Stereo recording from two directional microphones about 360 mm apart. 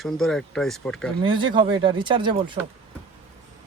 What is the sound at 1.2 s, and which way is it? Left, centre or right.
Speech, centre.